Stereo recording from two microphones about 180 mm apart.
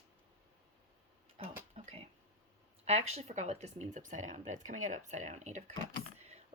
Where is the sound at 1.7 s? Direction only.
35° right (ahead or behind).